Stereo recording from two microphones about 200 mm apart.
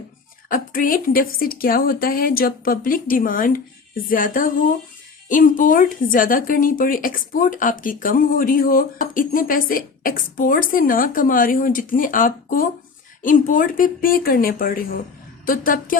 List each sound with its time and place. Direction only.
0.4 s speech: 45° left (ahead or behind)